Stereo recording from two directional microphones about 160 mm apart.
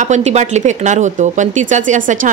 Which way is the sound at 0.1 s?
45° right (ahead or behind).